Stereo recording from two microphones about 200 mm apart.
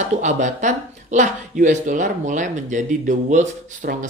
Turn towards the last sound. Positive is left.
turn(degrees=-40)  # may be behind; listen again after turning